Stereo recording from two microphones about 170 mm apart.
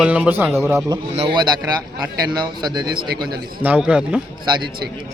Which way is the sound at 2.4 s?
25° right (ahead or behind).